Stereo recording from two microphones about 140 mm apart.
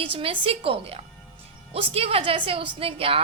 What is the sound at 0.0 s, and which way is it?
A woman's voice, 40° right (ahead or behind).